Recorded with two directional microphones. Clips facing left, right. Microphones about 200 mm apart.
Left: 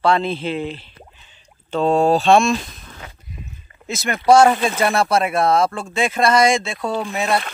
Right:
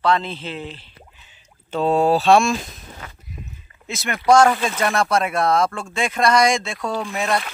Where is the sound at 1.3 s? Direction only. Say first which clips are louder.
Left 3 dB; 5° right (ahead or behind).